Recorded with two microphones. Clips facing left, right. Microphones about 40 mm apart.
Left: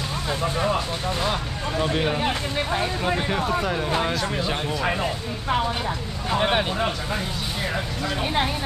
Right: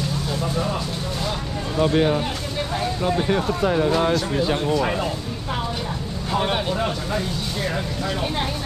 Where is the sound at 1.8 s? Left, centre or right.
Centre.